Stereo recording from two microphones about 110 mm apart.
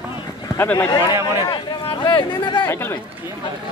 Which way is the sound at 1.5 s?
50° left (ahead or behind).